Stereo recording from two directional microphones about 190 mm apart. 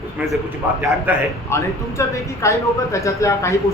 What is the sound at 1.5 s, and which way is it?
Speech, 15° left (ahead or behind).